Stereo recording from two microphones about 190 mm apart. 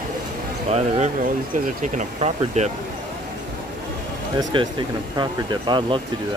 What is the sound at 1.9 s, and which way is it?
Speech, 35° right (ahead or behind).